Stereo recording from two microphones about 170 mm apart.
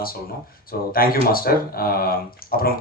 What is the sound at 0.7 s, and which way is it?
A man's voice, 60° left (ahead or behind).